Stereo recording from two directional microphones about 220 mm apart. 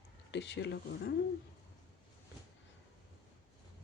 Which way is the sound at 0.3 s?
55° left (ahead or behind).